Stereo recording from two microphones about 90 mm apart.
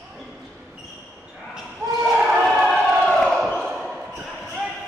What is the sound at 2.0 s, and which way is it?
Basketball bounce, centre (ahead or behind).